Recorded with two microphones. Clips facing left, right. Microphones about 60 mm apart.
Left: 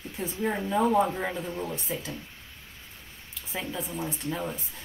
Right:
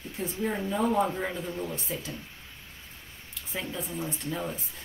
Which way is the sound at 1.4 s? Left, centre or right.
Left.